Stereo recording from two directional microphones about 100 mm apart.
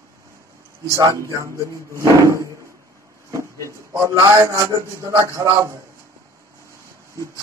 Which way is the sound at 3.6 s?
30° right (ahead or behind).